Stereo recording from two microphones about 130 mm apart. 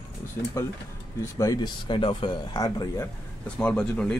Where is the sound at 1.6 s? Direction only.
40° left (ahead or behind).